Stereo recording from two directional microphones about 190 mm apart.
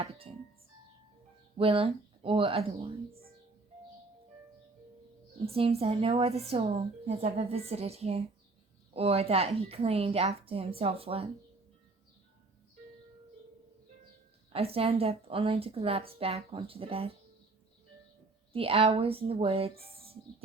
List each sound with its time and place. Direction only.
0.0 s a woman's voice: 30° right (ahead or behind)
1.5 s speech: 30° right (ahead or behind)
5.5 s a woman's voice: 30° right (ahead or behind)
14.5 s a woman's voice: 30° right (ahead or behind)
18.5 s a woman's voice: 30° right (ahead or behind)